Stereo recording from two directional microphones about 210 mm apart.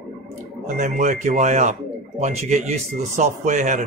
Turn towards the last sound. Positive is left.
turn(degrees=-35)  # may be behind; listen again after turning